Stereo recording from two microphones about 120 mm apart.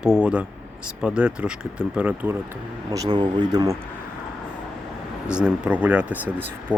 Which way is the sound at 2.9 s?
30° right (ahead or behind).